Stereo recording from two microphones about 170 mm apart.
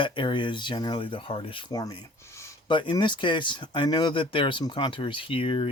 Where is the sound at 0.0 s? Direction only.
30° left (ahead or behind).